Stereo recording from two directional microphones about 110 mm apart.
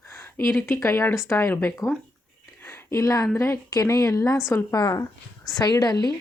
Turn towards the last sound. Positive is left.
turn(degrees=35)  # may be behind; listen again after turning